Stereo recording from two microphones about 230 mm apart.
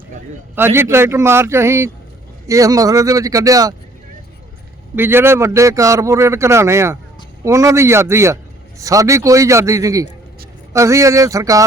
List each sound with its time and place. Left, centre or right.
0.5 s speech: centre
4.9 s speech: centre